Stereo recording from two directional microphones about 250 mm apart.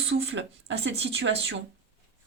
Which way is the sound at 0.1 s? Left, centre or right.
Right.